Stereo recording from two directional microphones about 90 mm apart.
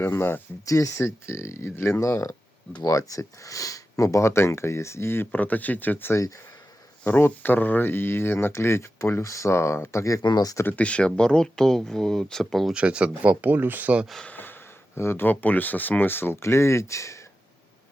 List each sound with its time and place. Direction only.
0.0 s speech: 25° left (ahead or behind)
0.6 s speech: 35° left (ahead or behind)
10.2 s speech: 45° left (ahead or behind)
10.6 s speech: 15° left (ahead or behind)
12.7 s speech: 10° right (ahead or behind)
14.3 s gasp: 20° left (ahead or behind)
14.9 s speech: 25° left (ahead or behind)